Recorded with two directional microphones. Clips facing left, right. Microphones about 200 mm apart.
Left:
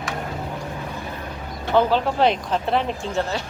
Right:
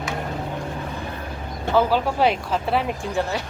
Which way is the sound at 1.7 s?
5° right (ahead or behind).